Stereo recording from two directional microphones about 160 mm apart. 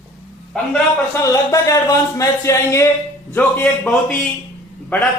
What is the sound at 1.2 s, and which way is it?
A man's voice, 20° left (ahead or behind).